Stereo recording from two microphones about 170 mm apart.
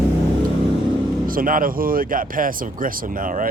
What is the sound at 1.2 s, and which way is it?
Speech, 55° right (ahead or behind).